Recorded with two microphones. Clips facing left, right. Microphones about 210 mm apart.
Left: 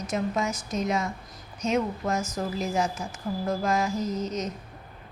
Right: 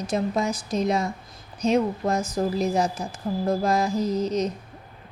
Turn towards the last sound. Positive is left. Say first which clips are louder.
# right 5 dB
turn(degrees=-35)  # may be behind; listen again after turning